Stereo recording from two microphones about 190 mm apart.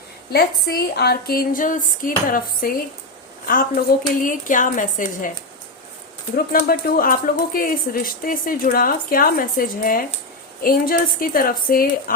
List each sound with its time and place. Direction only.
0.3 s speech: 55° left (ahead or behind)
6.3 s speech: 50° left (ahead or behind)